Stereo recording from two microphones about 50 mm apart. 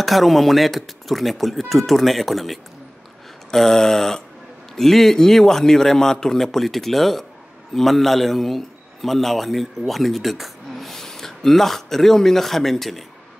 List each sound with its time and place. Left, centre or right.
0.0 s a man's voice: centre
3.5 s a sound: centre
4.7 s a man's voice: centre